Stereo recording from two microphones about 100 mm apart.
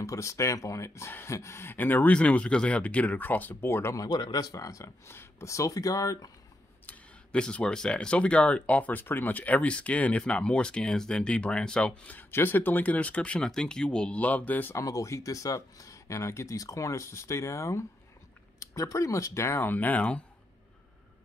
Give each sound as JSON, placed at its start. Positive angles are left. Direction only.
{"t": 0.0, "sound": "speech", "side_deg": 30}
{"t": 4.1, "sound": "speech", "side_deg": 45}
{"t": 6.9, "sound": "speech", "side_deg": 10}
{"t": 14.8, "sound": "speech", "side_deg": 30}